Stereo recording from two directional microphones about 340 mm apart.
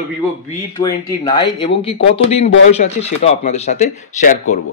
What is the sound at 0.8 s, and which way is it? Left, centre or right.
A man's voice, centre.